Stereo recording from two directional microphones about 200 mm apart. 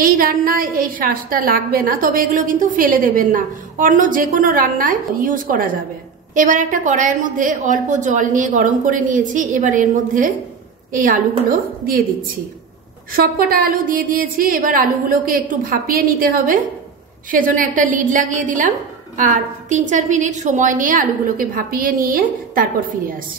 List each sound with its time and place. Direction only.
0.0 s a woman's voice: 45° right (ahead or behind)
13.1 s a woman's voice: 45° right (ahead or behind)